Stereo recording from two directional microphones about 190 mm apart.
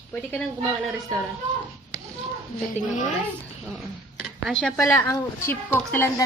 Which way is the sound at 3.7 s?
Centre (ahead or behind).